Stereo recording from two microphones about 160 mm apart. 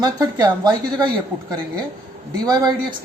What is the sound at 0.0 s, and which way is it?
Speech, 20° right (ahead or behind).